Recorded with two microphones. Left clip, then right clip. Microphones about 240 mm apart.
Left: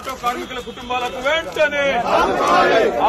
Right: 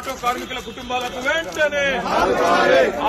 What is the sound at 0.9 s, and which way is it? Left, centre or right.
A man's voice, centre.